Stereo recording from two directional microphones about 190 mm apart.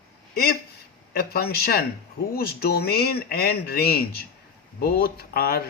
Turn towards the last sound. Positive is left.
turn(degrees=50)  # may be behind; listen again after turning